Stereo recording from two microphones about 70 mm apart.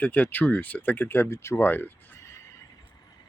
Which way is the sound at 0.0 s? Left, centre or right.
Left.